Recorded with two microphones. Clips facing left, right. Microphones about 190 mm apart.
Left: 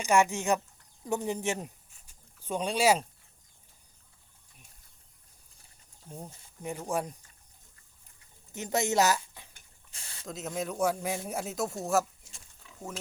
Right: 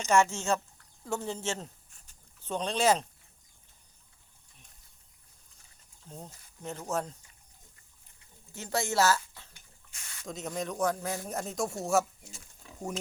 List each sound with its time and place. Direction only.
0.0 s speech: 15° left (ahead or behind)
6.1 s speech: 10° left (ahead or behind)
8.5 s a woman's voice: 20° left (ahead or behind)
9.9 s a sound: 30° left (ahead or behind)
10.2 s speech: centre (ahead or behind)